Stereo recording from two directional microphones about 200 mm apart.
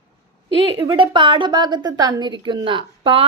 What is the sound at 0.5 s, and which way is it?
A woman's voice, 25° right (ahead or behind).